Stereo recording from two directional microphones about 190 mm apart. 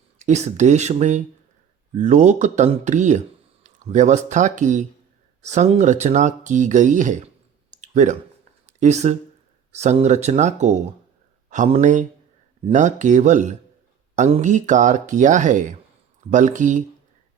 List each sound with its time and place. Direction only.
0.2 s speech: 35° right (ahead or behind)
7.7 s a sound: 40° right (ahead or behind)
9.7 s speech: 35° right (ahead or behind)